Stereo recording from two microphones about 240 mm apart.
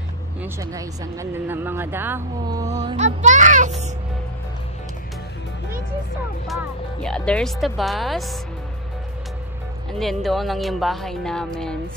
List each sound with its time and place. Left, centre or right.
0.4 s speech: centre
2.6 s music: right
6.4 s speech: centre
9.9 s speech: centre